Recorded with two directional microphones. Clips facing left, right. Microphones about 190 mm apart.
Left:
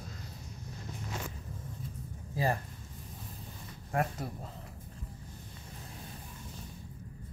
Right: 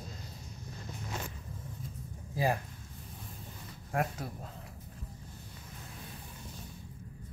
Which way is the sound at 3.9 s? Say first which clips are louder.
Left 1 dB; centre (ahead or behind).